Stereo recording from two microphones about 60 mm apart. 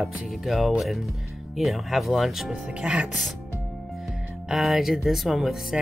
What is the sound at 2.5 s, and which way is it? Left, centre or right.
Speech, centre.